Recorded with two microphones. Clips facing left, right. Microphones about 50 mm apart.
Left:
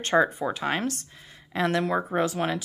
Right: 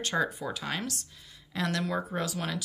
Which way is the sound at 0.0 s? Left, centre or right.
Left.